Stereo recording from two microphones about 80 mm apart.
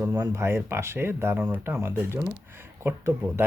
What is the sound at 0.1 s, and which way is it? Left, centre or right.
Speech, right.